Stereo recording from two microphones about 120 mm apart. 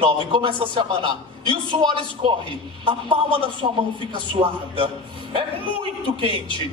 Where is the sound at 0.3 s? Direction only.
45° right (ahead or behind).